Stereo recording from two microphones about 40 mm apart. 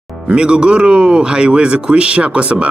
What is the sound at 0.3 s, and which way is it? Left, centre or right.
Speech, right.